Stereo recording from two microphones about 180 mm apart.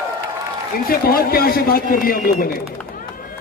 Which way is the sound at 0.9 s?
55° left (ahead or behind).